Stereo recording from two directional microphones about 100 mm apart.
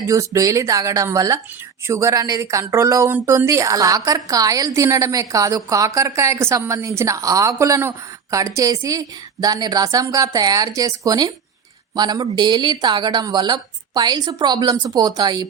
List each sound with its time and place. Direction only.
0.1 s a woman's voice: 35° right (ahead or behind)